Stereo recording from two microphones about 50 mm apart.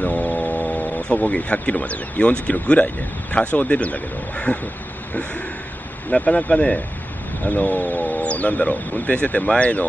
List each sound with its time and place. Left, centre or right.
0.0 s speech: left
6.1 s speech: left
7.4 s speech: left